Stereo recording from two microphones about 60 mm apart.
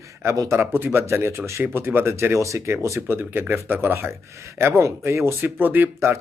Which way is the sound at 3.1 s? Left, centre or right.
Right.